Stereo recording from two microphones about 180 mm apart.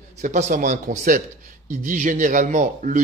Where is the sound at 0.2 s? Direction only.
40° right (ahead or behind).